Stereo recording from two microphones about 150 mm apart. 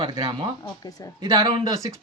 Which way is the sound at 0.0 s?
30° right (ahead or behind).